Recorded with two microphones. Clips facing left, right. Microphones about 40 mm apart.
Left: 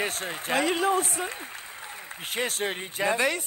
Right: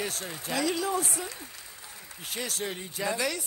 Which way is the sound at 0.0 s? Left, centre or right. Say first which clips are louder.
Left 4 dB; left.